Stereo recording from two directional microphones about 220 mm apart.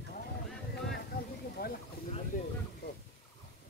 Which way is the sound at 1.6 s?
45° left (ahead or behind).